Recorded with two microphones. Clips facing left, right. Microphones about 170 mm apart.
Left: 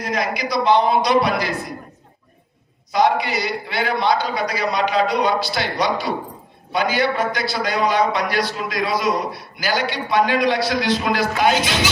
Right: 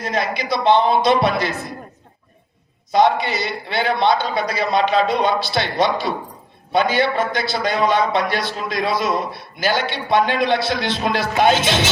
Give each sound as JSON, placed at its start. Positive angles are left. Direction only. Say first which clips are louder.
{"t": 0.0, "sound": "a man's voice", "louder": "even", "side_deg": -25}
{"t": 2.9, "sound": "a man's voice", "louder": "right 2 dB", "side_deg": -25}